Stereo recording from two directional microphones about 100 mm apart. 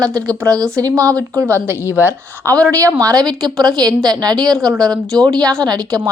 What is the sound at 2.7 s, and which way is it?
A woman's voice, 30° right (ahead or behind).